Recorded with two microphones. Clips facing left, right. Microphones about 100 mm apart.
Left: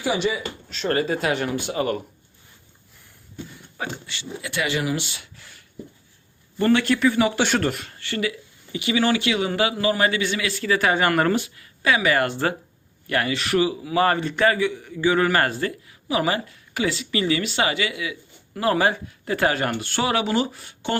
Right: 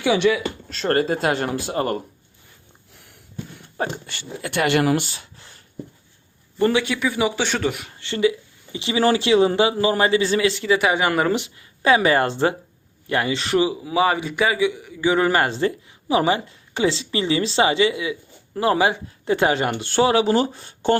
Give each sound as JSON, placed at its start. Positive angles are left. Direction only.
{"t": 0.0, "sound": "speech", "side_deg": -85}
{"t": 0.7, "sound": "a man's voice", "side_deg": -45}
{"t": 3.8, "sound": "speech", "side_deg": -50}
{"t": 5.0, "sound": "a sound", "side_deg": -35}
{"t": 6.7, "sound": "a man's voice", "side_deg": -5}
{"t": 7.3, "sound": "a man's voice", "side_deg": 10}
{"t": 7.6, "sound": "speech", "side_deg": -5}
{"t": 7.9, "sound": "a man's voice", "side_deg": -20}
{"t": 11.3, "sound": "speech", "side_deg": -20}
{"t": 14.0, "sound": "a man's voice", "side_deg": -10}